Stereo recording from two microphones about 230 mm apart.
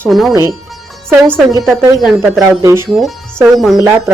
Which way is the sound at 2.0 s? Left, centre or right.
Centre.